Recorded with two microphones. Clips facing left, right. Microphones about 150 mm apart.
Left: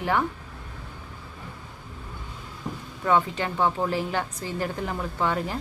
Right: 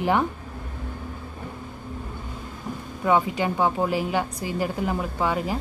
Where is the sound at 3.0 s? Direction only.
15° right (ahead or behind).